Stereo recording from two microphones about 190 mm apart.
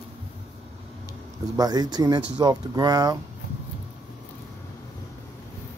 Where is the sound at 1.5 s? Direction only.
20° right (ahead or behind).